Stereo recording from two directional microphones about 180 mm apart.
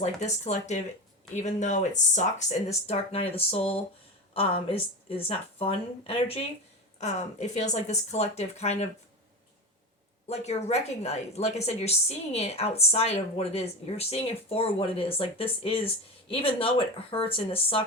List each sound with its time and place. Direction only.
0.0 s speech: 40° left (ahead or behind)
2.8 s speech: 35° left (ahead or behind)
10.2 s speech: 35° left (ahead or behind)